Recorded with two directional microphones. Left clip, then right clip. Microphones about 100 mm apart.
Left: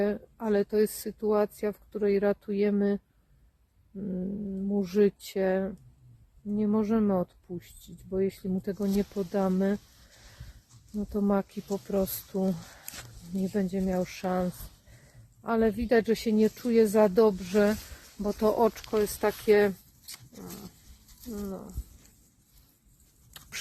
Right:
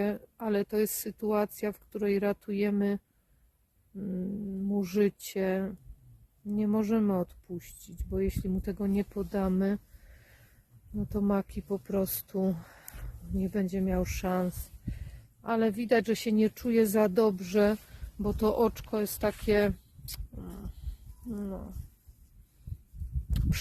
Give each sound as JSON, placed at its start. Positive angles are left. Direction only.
{"t": 0.0, "sound": "speech", "side_deg": -30}
{"t": 3.9, "sound": "dog", "side_deg": -35}
{"t": 4.7, "sound": "speech", "side_deg": -30}
{"t": 10.9, "sound": "speech", "side_deg": -40}
{"t": 18.2, "sound": "speech", "side_deg": -25}
{"t": 19.5, "sound": "dog", "side_deg": -35}
{"t": 21.4, "sound": "speech", "side_deg": -35}